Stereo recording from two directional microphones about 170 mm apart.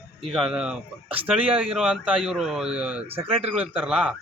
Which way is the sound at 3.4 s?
10° right (ahead or behind).